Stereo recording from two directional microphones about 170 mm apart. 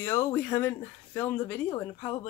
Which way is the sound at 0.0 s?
15° left (ahead or behind).